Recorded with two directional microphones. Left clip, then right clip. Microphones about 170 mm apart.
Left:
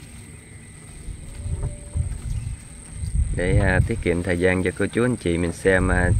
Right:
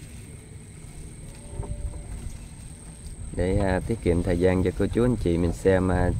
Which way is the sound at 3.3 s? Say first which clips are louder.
Left 3 dB; 5° right (ahead or behind).